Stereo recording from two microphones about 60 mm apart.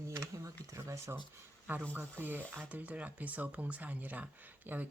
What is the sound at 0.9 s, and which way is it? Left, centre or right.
Speech, right.